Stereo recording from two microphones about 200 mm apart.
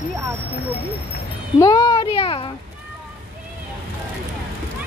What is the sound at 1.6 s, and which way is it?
Speech, 20° left (ahead or behind).